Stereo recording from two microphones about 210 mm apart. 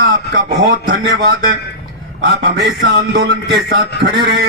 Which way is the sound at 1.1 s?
50° right (ahead or behind).